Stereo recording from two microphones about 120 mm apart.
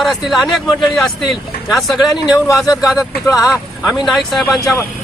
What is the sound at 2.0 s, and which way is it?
Speech, 30° left (ahead or behind).